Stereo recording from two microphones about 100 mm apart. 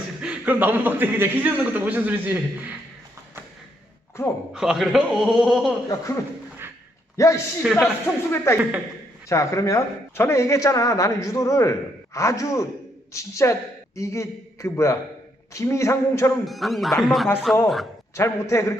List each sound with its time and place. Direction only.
0.2 s a man's voice: 15° right (ahead or behind)
4.5 s speech: 5° right (ahead or behind)
5.9 s speech: 30° left (ahead or behind)
7.6 s speech: centre (ahead or behind)
8.0 s speech: 25° left (ahead or behind)
16.5 s speech: centre (ahead or behind)
18.1 s speech: 30° left (ahead or behind)